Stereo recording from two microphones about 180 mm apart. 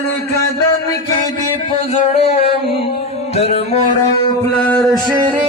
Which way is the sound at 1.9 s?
35° left (ahead or behind).